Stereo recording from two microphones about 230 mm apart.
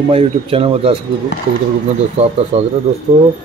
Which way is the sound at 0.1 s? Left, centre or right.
Right.